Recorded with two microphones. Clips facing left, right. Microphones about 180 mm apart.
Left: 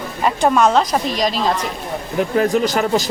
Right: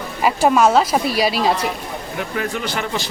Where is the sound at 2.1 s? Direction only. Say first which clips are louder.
Left 9 dB; 40° left (ahead or behind).